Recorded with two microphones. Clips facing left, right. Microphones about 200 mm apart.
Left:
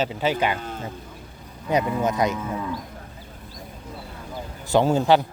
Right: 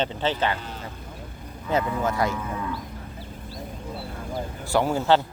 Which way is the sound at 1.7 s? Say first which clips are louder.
Left 2 dB; 20° left (ahead or behind).